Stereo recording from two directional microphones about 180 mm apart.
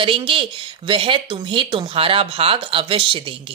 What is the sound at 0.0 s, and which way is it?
Speech, 30° right (ahead or behind).